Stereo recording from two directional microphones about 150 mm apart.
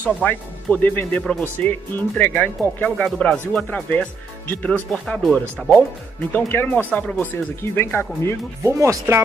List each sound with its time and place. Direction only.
0.2 s speech: 10° left (ahead or behind)
8.6 s speech: 20° right (ahead or behind)